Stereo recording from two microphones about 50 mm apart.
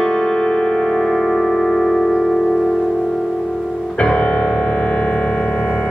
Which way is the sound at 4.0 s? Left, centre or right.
Centre.